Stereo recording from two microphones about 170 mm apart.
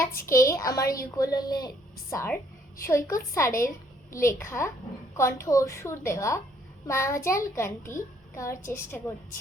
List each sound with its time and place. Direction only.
0.3 s a woman's voice: 15° left (ahead or behind)